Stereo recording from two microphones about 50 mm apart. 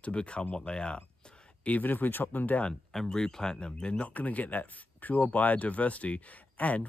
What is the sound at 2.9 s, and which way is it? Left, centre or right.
A man's voice, centre.